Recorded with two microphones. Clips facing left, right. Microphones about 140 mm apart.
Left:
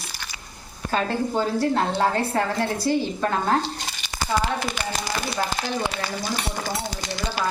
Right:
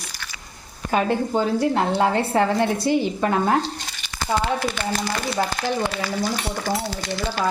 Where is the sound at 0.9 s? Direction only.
10° right (ahead or behind).